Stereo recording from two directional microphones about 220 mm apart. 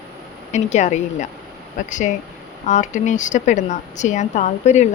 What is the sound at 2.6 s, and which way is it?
Speech, 35° left (ahead or behind).